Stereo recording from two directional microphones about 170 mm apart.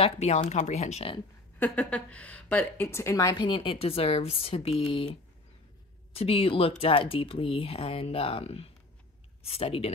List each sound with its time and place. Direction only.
0.0 s speech: 40° left (ahead or behind)
1.6 s a woman's voice: 5° left (ahead or behind); by 5.1 s 35° left (ahead or behind)
6.1 s speech: 35° left (ahead or behind)